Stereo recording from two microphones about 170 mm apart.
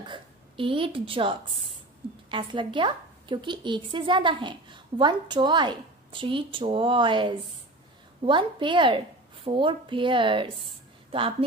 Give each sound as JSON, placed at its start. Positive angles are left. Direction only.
{"t": 0.0, "sound": "a woman's voice", "side_deg": -30}